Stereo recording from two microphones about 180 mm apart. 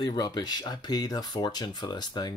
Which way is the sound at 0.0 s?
20° left (ahead or behind).